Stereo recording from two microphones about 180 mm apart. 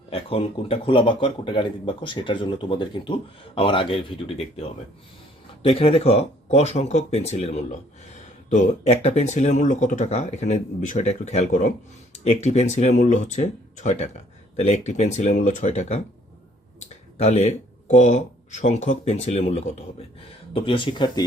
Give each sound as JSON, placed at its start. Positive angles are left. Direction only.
{"t": 0.1, "sound": "speech", "side_deg": 30}